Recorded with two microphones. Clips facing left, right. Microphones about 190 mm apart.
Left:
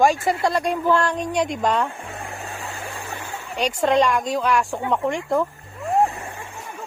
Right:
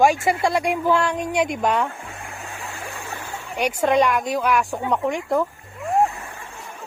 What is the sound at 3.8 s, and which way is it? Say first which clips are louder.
A woman's voice: even; 5° right (ahead or behind).